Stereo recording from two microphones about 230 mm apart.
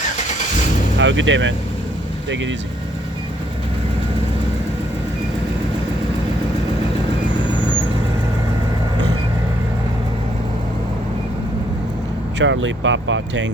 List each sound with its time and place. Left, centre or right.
0.9 s speech: right
12.4 s speech: right